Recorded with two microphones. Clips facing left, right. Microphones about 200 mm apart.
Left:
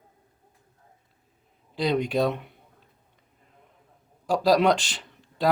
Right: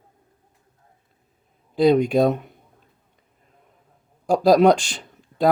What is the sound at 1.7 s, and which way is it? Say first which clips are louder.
Speech: right 8 dB; 50° right (ahead or behind).